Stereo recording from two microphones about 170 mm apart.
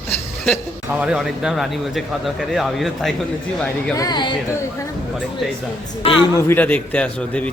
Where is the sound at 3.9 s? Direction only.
25° left (ahead or behind).